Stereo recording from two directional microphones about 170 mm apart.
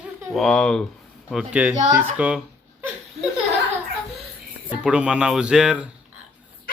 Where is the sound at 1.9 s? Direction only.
10° right (ahead or behind).